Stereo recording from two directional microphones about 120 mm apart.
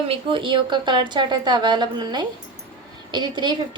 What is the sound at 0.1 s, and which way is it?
A woman's voice, 45° right (ahead or behind).